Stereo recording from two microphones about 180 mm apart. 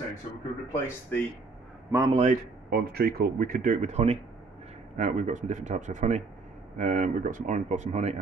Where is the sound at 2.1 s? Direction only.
35° right (ahead or behind).